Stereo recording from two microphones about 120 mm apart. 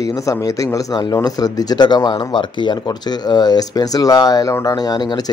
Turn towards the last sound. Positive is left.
turn(degrees=35)  # may be behind; listen again after turning